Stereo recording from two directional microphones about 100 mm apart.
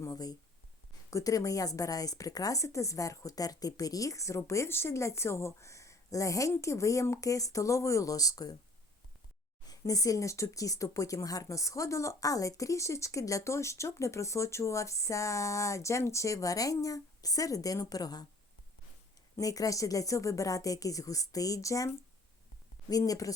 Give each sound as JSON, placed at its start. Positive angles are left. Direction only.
{"t": 0.0, "sound": "speech", "side_deg": 40}
{"t": 9.6, "sound": "speech", "side_deg": 35}
{"t": 19.4, "sound": "speech", "side_deg": 35}